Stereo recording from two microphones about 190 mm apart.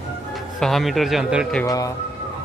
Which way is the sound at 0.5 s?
Centre (ahead or behind).